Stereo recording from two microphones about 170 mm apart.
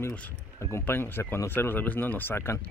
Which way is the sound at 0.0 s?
10° left (ahead or behind).